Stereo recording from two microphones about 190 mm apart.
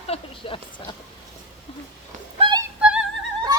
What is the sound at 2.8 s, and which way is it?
Music, 5° right (ahead or behind).